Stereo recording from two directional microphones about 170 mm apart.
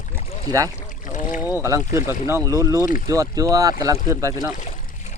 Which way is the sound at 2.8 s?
55° left (ahead or behind).